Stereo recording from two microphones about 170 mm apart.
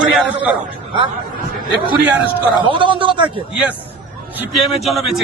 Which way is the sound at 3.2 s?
10° right (ahead or behind).